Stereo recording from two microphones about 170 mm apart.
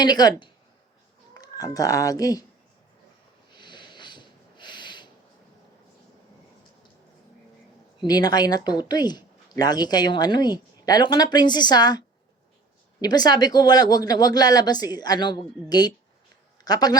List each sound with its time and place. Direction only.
0.0 s speech: 25° left (ahead or behind)
3.6 s a sound: 25° left (ahead or behind)
8.0 s speech: 25° left (ahead or behind)